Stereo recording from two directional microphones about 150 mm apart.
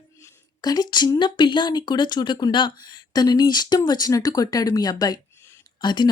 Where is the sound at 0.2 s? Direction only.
25° left (ahead or behind).